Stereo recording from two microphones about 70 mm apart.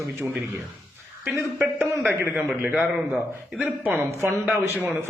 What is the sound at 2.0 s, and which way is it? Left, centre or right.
Speech, right.